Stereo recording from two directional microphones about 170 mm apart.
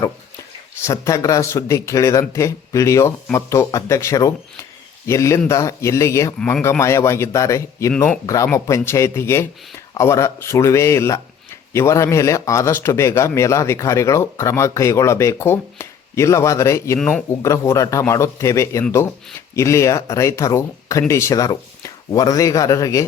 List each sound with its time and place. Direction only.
0.9 s speech: 20° left (ahead or behind)
17.0 s speech: 5° left (ahead or behind)
17.4 s speech: 15° left (ahead or behind)